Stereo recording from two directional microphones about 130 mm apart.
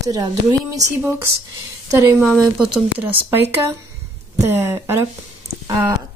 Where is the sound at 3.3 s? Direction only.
20° right (ahead or behind).